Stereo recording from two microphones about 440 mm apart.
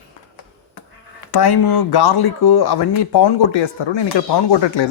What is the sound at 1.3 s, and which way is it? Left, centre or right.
Speech, left.